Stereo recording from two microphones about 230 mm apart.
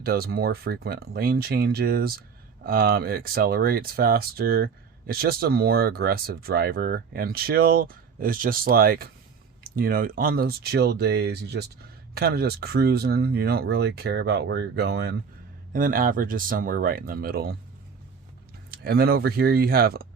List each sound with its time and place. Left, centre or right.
0.0 s speech: right
18.7 s speech: right